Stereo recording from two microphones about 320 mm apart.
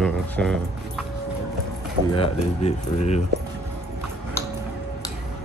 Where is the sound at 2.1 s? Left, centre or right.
Centre.